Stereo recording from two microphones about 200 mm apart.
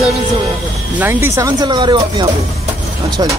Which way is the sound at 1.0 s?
10° right (ahead or behind).